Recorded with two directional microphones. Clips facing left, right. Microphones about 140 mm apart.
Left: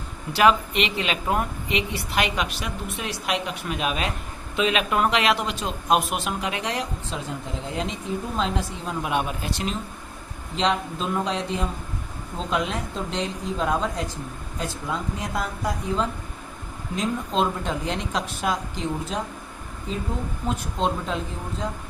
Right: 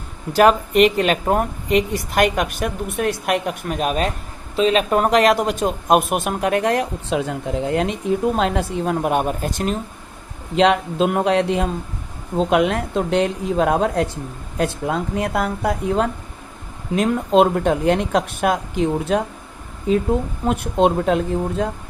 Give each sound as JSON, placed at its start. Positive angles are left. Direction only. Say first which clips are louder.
{"t": 0.3, "sound": "a woman's voice", "louder": "right 6 dB", "side_deg": -45}
{"t": 10.5, "sound": "speech", "louder": "right 8 dB", "side_deg": -65}
{"t": 20.5, "sound": "speech", "louder": "right 9 dB", "side_deg": -60}